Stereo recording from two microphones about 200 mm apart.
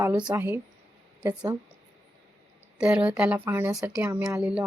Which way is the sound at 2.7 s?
5° right (ahead or behind).